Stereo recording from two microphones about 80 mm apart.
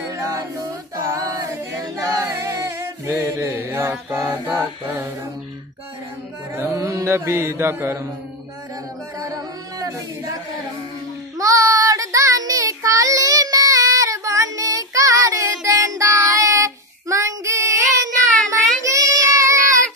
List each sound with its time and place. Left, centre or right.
1.1 s a capella: right
1.5 s a capella: right
2.3 s singing: right
3.3 s chant: right
6.5 s mantra: right
9.2 s singing: right
11.3 s child singing: right